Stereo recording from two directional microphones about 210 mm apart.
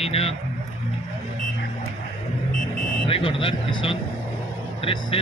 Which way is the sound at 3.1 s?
25° left (ahead or behind).